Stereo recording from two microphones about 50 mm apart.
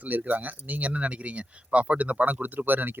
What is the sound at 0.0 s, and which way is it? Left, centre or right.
Speech, right.